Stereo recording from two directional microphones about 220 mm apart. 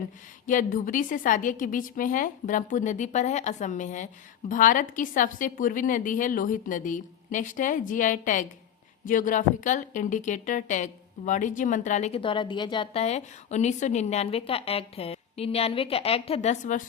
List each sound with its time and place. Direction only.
0.4 s a woman's voice: 35° left (ahead or behind)